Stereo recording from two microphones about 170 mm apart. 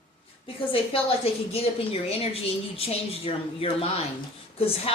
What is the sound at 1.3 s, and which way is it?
Speech, 35° left (ahead or behind).